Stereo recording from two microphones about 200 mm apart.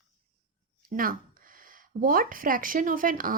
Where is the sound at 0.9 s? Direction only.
45° right (ahead or behind).